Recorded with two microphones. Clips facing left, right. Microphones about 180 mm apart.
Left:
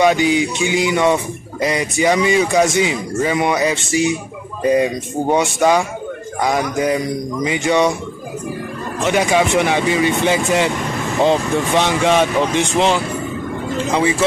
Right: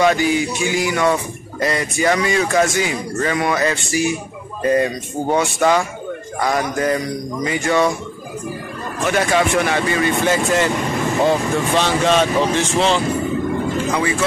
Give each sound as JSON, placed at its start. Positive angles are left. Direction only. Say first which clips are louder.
{"t": 0.0, "sound": "music", "louder": "left 2 dB", "side_deg": 15}
{"t": 1.6, "sound": "speech", "louder": "left 2 dB", "side_deg": 15}
{"t": 3.9, "sound": "music", "louder": "left 2 dB", "side_deg": 20}
{"t": 4.6, "sound": "speech", "louder": "left 2 dB", "side_deg": 15}
{"t": 7.4, "sound": "speech", "louder": "left 1 dB", "side_deg": 20}
{"t": 9.0, "sound": "speech", "louder": "left 2 dB", "side_deg": 15}